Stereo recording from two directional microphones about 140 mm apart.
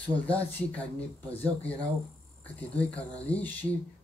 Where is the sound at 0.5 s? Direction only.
10° left (ahead or behind).